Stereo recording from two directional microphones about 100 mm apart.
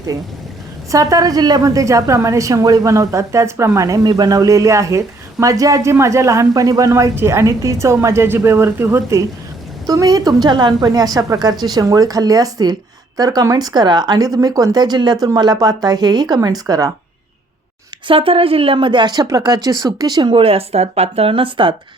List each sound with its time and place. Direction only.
0.9 s a woman's voice: 35° right (ahead or behind)
9.8 s a woman's voice: 40° right (ahead or behind)
18.1 s speech: 65° right (ahead or behind); by 20.3 s 40° right (ahead or behind)
20.3 s speech: 75° right (ahead or behind)